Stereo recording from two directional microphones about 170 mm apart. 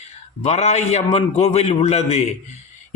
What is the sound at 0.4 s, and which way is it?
A man's voice, 40° left (ahead or behind).